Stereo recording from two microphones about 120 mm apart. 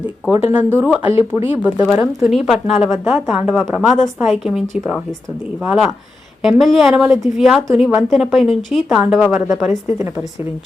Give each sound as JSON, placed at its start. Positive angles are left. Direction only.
{"t": 0.3, "sound": "a woman's voice", "side_deg": -15}